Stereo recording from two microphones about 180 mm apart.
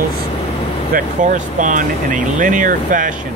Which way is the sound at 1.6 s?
45° right (ahead or behind).